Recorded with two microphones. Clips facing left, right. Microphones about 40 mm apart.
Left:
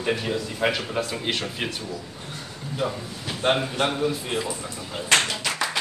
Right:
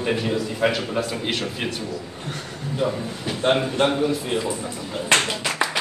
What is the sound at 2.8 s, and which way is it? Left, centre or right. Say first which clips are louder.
Speech: right 4 dB; centre.